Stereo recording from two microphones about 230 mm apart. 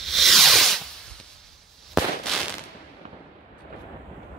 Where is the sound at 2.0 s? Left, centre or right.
Centre.